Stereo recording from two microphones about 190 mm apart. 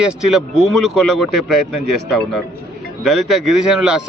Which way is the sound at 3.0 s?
Centre (ahead or behind).